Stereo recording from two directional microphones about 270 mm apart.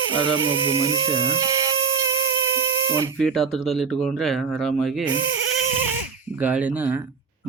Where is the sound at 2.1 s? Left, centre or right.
Right.